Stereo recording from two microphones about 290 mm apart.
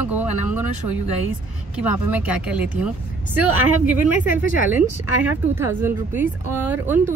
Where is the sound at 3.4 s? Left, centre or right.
Right.